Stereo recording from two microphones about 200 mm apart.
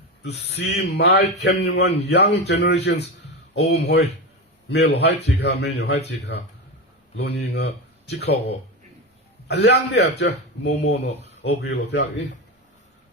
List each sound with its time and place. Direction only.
0.2 s a man's voice: 55° left (ahead or behind)